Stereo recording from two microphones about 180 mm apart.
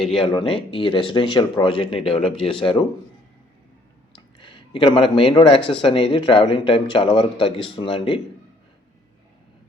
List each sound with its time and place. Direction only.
0.2 s speech: 30° left (ahead or behind)
4.1 s speech: 30° left (ahead or behind)